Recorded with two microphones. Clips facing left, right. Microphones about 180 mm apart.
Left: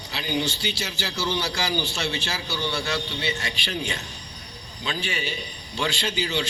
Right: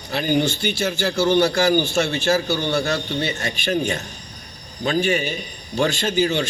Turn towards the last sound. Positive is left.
turn(degrees=-50)  # may be behind; listen again after turning